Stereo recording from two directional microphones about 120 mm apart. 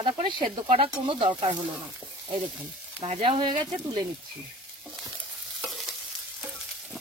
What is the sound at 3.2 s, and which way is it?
Speech, 45° right (ahead or behind).